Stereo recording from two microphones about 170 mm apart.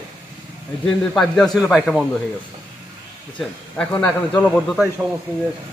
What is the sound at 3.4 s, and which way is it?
A man's voice, 5° left (ahead or behind).